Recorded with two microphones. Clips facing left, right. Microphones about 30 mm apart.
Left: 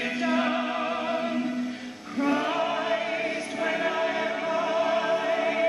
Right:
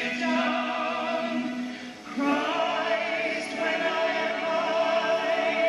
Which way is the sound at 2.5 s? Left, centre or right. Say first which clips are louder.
Even; right.